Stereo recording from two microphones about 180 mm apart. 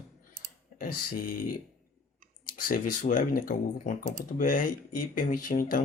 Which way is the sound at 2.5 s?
50° left (ahead or behind).